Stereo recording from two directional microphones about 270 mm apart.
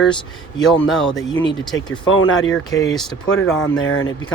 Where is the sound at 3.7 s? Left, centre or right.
Left.